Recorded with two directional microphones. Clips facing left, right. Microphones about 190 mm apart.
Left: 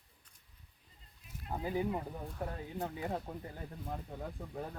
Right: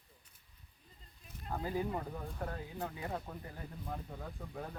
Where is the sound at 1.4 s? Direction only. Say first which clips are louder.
Left 2 dB; 10° left (ahead or behind).